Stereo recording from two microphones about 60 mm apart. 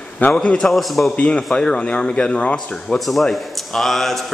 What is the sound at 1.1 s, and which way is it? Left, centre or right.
A man's voice, centre.